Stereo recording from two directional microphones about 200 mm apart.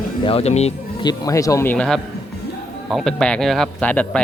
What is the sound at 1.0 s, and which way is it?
A man's voice, 20° left (ahead or behind).